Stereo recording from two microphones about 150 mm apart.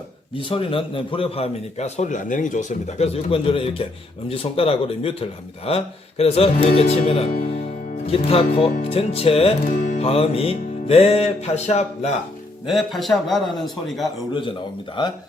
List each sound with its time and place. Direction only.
0.3 s a man's voice: 35° left (ahead or behind)
12.6 s a man's voice: centre (ahead or behind)
15.0 s a man's voice: 30° left (ahead or behind)